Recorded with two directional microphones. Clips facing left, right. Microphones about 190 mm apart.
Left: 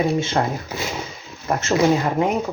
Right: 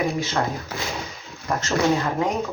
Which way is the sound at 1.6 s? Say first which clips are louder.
Left 3 dB; 25° left (ahead or behind).